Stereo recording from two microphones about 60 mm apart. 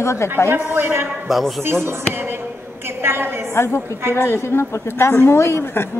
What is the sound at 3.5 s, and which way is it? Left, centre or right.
A woman's voice, left.